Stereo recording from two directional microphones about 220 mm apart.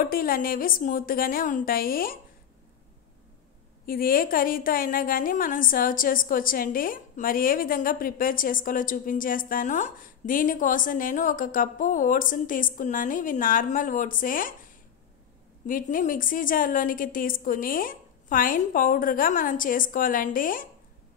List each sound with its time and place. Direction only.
0.0 s a woman's voice: 40° left (ahead or behind)
3.8 s a woman's voice: 40° left (ahead or behind)
15.6 s a woman's voice: 35° left (ahead or behind)